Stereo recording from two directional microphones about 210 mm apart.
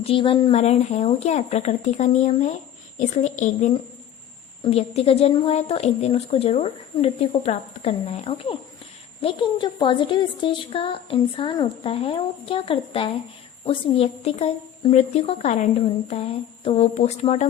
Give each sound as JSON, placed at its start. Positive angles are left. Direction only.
{"t": 0.0, "sound": "a woman's voice", "side_deg": 25}
{"t": 16.6, "sound": "speech", "side_deg": 30}